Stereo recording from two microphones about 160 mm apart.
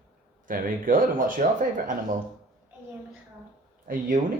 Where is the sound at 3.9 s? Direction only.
60° right (ahead or behind).